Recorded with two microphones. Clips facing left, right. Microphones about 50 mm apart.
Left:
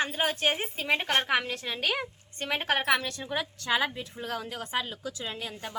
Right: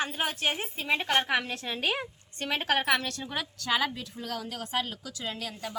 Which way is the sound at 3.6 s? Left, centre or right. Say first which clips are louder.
Right 1 dB; left.